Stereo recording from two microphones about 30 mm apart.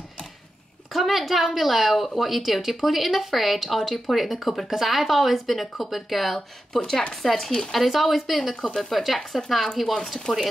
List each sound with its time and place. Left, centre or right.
0.9 s a woman's voice: centre
6.7 s speech: centre
7.2 s a woman's voice: centre